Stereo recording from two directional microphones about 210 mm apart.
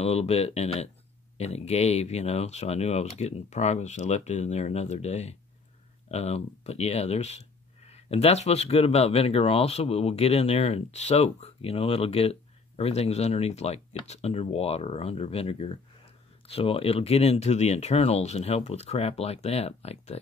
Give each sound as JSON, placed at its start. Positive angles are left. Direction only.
{"t": 0.0, "sound": "speech", "side_deg": 30}